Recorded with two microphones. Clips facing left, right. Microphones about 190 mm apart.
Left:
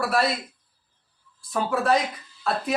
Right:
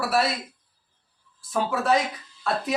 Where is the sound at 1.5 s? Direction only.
Centre (ahead or behind).